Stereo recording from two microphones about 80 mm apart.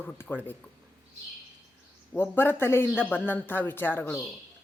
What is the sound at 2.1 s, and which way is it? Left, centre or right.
A woman's voice, left.